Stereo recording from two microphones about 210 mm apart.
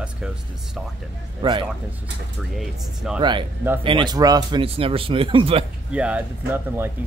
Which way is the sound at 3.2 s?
20° right (ahead or behind).